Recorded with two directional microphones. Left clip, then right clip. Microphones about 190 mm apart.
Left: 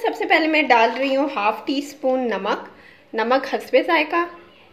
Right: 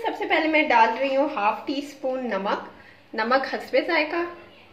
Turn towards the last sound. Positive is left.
turn(degrees=35)  # may be behind; listen again after turning